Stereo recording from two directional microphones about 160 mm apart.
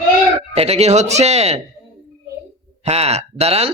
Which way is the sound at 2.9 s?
40° right (ahead or behind).